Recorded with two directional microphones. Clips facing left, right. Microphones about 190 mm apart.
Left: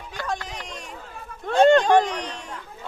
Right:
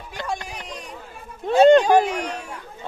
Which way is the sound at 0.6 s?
Centre (ahead or behind).